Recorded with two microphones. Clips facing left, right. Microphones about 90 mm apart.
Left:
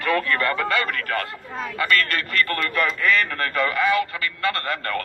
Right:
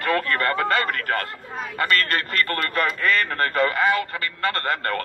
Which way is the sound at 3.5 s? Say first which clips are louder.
Left 1 dB; 40° right (ahead or behind).